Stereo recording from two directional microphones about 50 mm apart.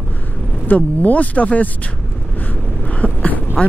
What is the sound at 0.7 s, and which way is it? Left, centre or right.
Speech, left.